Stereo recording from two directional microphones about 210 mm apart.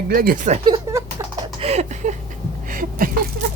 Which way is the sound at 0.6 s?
20° right (ahead or behind).